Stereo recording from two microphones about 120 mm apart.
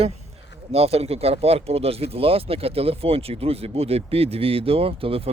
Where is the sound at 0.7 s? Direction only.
60° right (ahead or behind).